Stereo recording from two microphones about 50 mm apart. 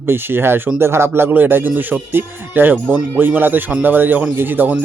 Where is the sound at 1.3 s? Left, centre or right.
Right.